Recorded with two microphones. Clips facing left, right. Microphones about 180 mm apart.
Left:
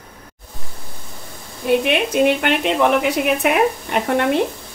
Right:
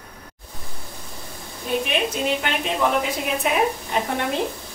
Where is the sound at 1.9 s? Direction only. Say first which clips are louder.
Left 7 dB; 65° left (ahead or behind).